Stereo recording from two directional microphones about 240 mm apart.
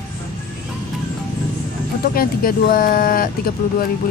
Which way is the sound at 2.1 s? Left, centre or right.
Left.